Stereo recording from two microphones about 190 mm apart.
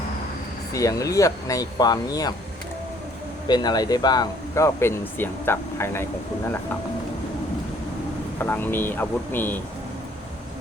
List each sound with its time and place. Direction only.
0.7 s speech: 15° left (ahead or behind)
3.4 s speech: 20° left (ahead or behind)
8.4 s speech: 10° left (ahead or behind)